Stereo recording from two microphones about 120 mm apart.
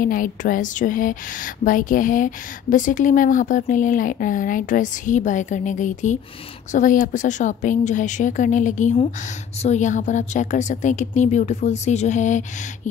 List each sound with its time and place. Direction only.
0.4 s speech: 90° left